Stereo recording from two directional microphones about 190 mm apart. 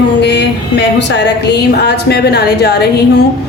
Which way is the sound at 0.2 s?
65° left (ahead or behind).